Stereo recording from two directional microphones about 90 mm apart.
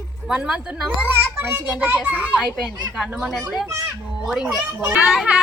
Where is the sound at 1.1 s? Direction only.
20° right (ahead or behind).